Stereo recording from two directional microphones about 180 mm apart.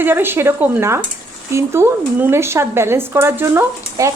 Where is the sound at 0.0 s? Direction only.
10° right (ahead or behind).